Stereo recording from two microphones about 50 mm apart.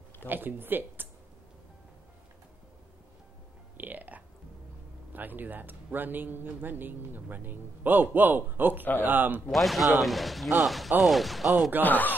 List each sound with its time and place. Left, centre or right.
0.3 s speech: right
3.7 s music: right
5.1 s speech: right
9.5 s speech: centre
11.8 s speech: left